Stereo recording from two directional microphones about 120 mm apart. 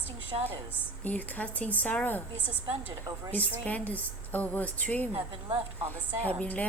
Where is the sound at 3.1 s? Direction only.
35° right (ahead or behind).